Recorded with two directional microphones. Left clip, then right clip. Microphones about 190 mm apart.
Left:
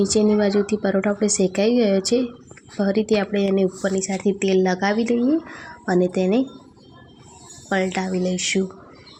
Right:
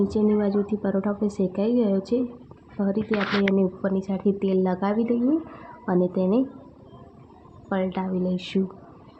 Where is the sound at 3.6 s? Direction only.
5° left (ahead or behind).